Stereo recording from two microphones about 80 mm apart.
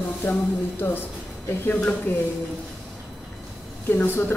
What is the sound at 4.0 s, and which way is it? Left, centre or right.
Speech, left.